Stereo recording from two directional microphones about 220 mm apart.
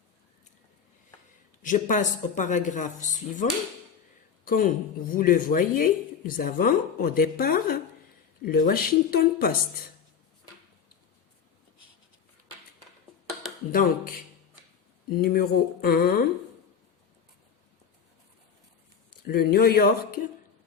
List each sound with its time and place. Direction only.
1.6 s speech: 35° left (ahead or behind)
4.4 s a woman's voice: 40° left (ahead or behind)
13.7 s speech: 40° left (ahead or behind)
19.3 s speech: 45° left (ahead or behind)